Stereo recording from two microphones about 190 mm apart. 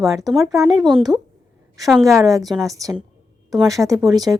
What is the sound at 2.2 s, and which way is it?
A woman's voice, 20° right (ahead or behind).